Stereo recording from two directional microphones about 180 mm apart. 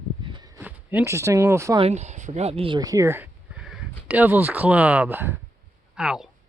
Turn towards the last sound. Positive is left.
turn(degrees=-5)  # may be behind; listen again after turning